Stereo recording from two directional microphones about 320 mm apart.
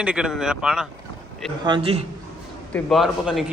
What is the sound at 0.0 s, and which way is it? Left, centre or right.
Speech, centre.